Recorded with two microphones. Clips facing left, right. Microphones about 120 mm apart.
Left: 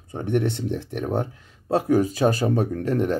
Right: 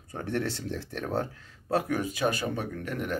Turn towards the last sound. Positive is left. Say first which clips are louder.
# left 10 dB
turn(degrees=30)  # may be behind; listen again after turning